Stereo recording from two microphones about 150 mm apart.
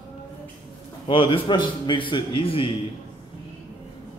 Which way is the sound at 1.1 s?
35° left (ahead or behind).